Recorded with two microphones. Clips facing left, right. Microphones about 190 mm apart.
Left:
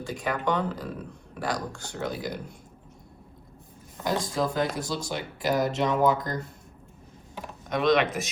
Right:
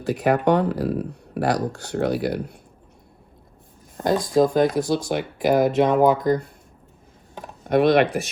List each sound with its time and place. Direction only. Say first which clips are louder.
0.0 s speech: right 9 dB; 65° right (ahead or behind)
3.9 s speech: right 9 dB; 50° right (ahead or behind)
7.7 s speech: right 6 dB; 55° right (ahead or behind)